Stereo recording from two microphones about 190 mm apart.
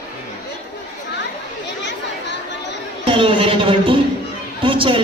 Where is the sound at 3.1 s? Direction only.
25° right (ahead or behind).